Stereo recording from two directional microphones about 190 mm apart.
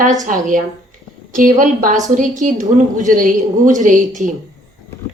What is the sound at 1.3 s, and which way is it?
A woman's voice, 45° right (ahead or behind).